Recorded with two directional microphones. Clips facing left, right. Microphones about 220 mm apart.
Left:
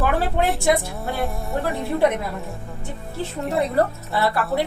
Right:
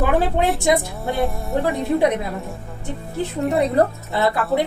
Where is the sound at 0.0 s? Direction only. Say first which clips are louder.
Right 3 dB; 15° right (ahead or behind).